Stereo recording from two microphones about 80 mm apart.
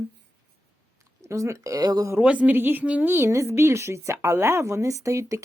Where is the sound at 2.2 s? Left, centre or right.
Centre.